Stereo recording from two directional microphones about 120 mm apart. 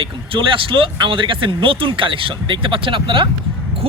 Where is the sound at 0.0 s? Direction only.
45° right (ahead or behind).